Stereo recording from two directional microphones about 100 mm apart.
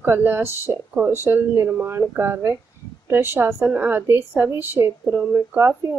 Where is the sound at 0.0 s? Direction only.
20° right (ahead or behind).